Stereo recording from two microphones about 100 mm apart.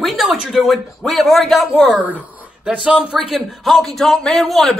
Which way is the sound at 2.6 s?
10° right (ahead or behind).